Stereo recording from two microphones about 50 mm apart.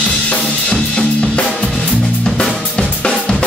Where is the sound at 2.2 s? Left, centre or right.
Centre.